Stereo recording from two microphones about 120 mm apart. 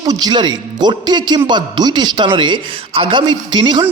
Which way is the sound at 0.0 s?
35° right (ahead or behind).